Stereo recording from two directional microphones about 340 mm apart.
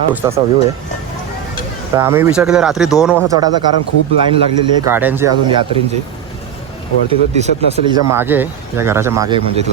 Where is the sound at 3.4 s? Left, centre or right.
Left.